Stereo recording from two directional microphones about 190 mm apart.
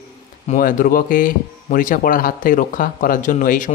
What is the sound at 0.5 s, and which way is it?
Speech, 45° left (ahead or behind).